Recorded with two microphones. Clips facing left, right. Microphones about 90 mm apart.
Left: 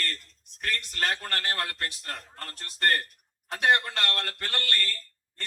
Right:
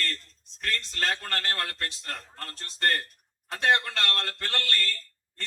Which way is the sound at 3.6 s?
15° left (ahead or behind).